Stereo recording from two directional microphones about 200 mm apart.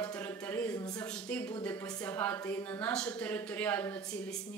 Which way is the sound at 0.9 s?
5° left (ahead or behind).